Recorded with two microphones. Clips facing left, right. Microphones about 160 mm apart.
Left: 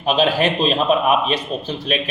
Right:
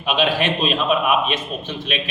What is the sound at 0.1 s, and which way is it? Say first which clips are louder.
A man's voice: left 3 dB; 40° left (ahead or behind).